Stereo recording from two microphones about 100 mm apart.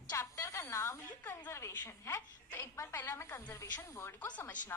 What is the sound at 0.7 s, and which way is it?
Speech, 30° left (ahead or behind).